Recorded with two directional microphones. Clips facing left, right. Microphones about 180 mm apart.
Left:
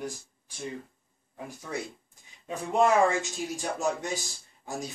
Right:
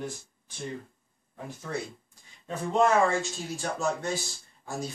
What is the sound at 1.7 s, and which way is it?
Speech, 10° left (ahead or behind).